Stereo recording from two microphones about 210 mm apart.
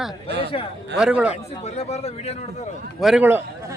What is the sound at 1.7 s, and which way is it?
Speech, 30° left (ahead or behind).